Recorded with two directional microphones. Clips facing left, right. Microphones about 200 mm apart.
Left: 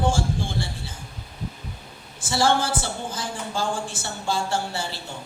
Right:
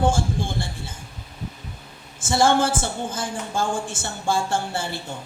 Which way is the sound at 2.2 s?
50° right (ahead or behind).